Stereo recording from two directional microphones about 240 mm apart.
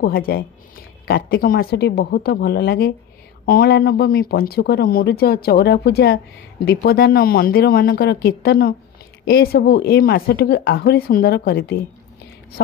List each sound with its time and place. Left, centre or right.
0.0 s speech: left